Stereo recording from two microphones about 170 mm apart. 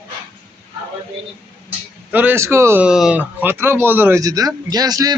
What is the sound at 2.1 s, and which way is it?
Speech, 10° right (ahead or behind).